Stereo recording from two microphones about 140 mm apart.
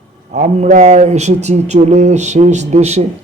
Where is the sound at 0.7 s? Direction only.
55° right (ahead or behind).